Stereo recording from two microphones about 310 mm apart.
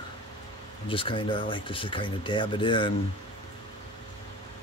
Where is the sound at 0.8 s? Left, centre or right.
Centre.